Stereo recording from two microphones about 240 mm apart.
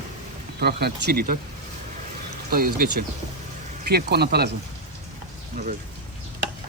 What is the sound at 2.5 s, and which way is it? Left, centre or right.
Speech, right.